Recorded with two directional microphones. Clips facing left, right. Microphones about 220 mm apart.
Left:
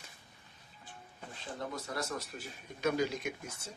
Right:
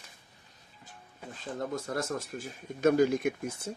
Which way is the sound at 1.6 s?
50° right (ahead or behind).